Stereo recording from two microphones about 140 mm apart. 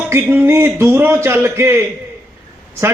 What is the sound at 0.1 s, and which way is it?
A man's voice, 15° right (ahead or behind).